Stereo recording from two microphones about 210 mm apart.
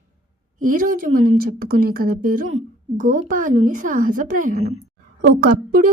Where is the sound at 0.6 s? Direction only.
40° right (ahead or behind).